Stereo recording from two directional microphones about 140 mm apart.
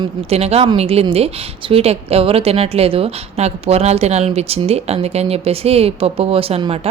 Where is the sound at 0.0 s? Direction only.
45° right (ahead or behind).